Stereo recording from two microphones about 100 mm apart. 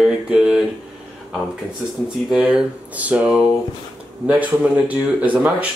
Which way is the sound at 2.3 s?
10° right (ahead or behind).